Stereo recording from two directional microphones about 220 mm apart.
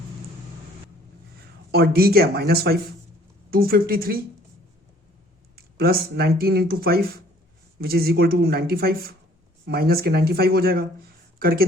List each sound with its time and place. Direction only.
1.7 s speech: 45° right (ahead or behind)
5.5 s speech: 45° right (ahead or behind)